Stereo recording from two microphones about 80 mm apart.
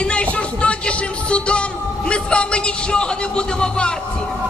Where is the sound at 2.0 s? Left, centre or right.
Centre.